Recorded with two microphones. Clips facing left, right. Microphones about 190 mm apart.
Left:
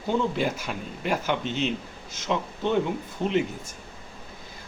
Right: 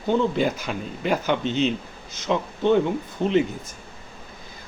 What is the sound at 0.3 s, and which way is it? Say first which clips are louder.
Speech: right 4 dB; 5° left (ahead or behind).